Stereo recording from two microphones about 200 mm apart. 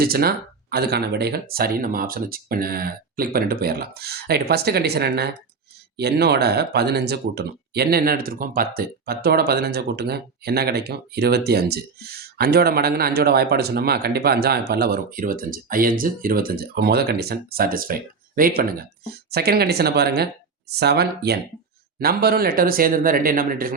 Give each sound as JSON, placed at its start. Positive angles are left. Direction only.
{"t": 0.0, "sound": "speech", "side_deg": -50}